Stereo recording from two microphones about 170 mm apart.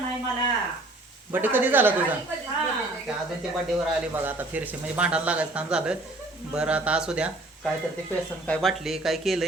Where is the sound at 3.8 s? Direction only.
10° right (ahead or behind).